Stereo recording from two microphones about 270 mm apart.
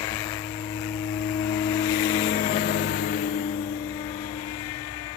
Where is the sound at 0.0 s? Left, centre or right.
Centre; by 3.3 s left.